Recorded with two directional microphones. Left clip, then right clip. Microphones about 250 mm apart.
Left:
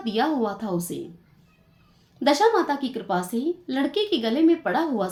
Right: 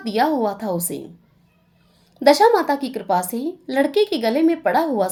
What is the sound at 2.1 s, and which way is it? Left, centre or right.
Speech, right.